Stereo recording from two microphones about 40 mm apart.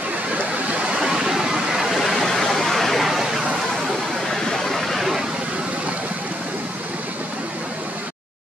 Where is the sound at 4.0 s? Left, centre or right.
Centre.